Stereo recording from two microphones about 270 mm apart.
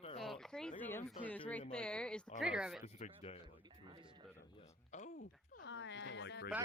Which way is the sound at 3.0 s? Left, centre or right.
Left.